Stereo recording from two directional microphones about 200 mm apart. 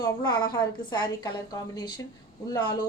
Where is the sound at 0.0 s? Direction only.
20° left (ahead or behind).